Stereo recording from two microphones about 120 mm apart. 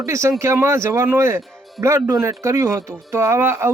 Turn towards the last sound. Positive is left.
turn(degrees=-20)  # may be behind; listen again after turning